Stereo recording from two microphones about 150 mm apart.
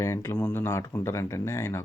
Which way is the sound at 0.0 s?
20° left (ahead or behind).